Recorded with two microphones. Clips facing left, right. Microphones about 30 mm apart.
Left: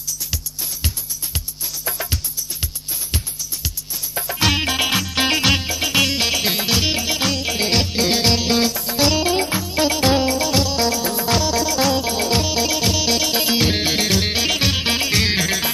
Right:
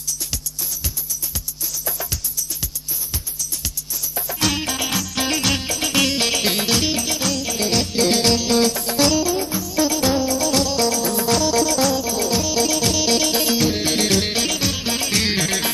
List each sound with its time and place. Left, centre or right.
1.9 s music: left
4.1 s music: left
5.6 s music: centre
6.9 s music: left
8.6 s music: centre
9.3 s music: left
10.3 s music: left
11.9 s music: left
12.5 s music: centre
13.6 s music: left
13.9 s music: centre
14.5 s music: left
15.0 s music: centre